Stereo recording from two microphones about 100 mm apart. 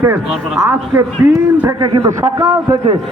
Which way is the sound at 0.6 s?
30° right (ahead or behind).